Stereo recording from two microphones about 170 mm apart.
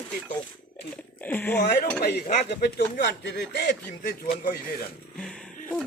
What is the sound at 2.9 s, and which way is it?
Speech, 85° left.